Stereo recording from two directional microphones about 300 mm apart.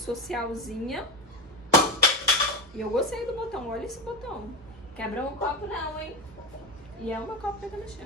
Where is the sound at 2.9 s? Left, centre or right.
Centre.